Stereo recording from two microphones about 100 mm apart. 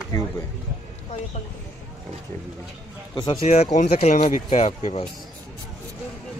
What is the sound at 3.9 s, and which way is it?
Speech, 90° left.